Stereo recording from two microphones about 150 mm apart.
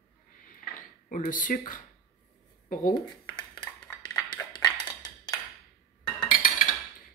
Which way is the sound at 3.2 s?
10° left (ahead or behind).